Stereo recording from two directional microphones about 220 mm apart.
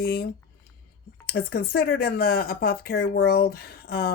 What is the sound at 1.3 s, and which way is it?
Speech, 45° left (ahead or behind).